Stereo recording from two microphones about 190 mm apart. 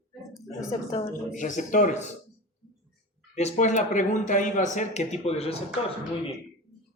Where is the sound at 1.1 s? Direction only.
45° left (ahead or behind).